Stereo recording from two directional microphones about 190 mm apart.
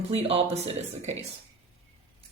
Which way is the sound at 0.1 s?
30° right (ahead or behind).